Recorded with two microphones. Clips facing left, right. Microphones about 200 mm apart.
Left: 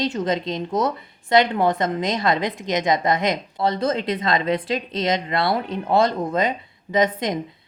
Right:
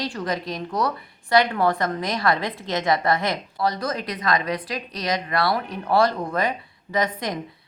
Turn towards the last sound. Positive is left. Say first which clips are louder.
# left 4 dB
turn(degrees=20)  # may be behind; listen again after turning